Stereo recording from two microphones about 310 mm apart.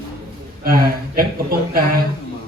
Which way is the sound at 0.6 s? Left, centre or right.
Right.